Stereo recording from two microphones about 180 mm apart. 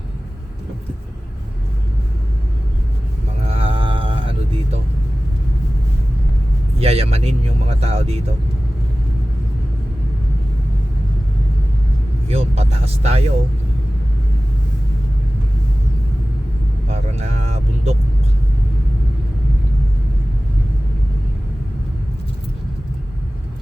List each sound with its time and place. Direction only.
3.4 s music: 35° right (ahead or behind)
6.7 s vehicle: 35° right (ahead or behind)
12.3 s vehicle: 35° right (ahead or behind)
16.9 s vehicle: 35° right (ahead or behind)